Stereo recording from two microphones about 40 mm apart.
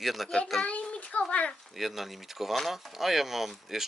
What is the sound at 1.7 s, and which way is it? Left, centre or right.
Speech, centre.